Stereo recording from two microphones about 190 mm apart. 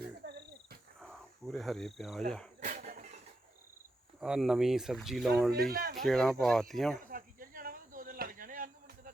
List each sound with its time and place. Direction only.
0.2 s cricket: 60° right (ahead or behind)
0.9 s cricket: centre (ahead or behind)
2.6 s a sound: 40° right (ahead or behind)
4.2 s speech: centre (ahead or behind)
5.5 s speech: 55° right (ahead or behind)
6.0 s speech: centre (ahead or behind)
7.0 s insect: 50° right (ahead or behind)